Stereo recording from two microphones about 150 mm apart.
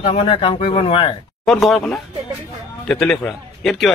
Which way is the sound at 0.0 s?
35° left (ahead or behind).